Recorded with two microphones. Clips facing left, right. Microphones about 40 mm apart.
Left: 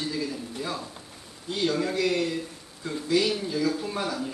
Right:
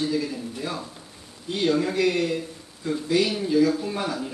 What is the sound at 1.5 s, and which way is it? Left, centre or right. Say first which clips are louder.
Speech: right 3 dB; right.